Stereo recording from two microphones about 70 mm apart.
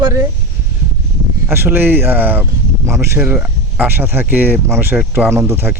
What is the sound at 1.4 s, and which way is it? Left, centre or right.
Speech, right.